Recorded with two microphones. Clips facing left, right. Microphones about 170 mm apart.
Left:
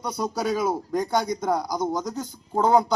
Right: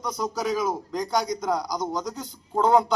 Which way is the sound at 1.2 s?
55° left (ahead or behind).